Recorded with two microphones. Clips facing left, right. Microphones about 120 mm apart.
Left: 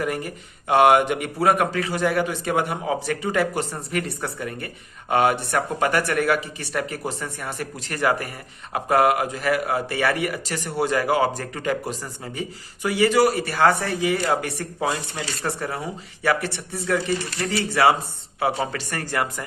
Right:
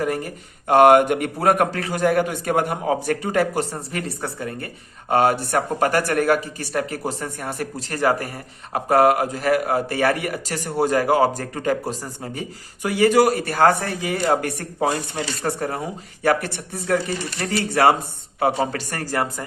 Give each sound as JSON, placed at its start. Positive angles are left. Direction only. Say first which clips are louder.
{"t": 0.0, "sound": "speech", "louder": "right 2 dB", "side_deg": -40}